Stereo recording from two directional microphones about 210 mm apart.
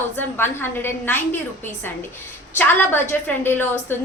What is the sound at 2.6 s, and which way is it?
A woman's voice, 10° left (ahead or behind).